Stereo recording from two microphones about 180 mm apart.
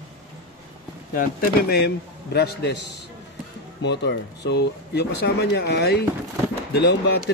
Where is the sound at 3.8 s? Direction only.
70° left (ahead or behind).